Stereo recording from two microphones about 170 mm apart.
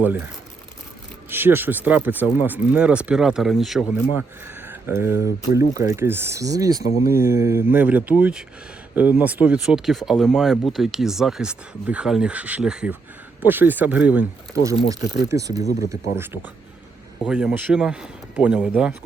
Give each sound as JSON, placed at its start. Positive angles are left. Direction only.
{"t": 0.0, "sound": "speech", "side_deg": -10}
{"t": 1.3, "sound": "speech", "side_deg": -10}
{"t": 4.6, "sound": "speech", "side_deg": -15}
{"t": 14.8, "sound": "speech", "side_deg": -20}